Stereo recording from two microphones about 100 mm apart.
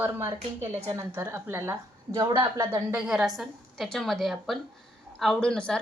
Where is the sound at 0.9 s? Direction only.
25° right (ahead or behind).